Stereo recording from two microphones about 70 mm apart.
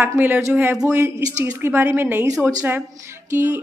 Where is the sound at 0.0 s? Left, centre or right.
Right.